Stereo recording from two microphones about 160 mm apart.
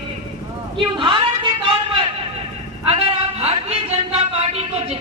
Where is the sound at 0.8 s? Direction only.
30° right (ahead or behind).